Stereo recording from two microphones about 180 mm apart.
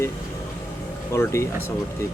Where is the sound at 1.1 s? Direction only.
15° left (ahead or behind).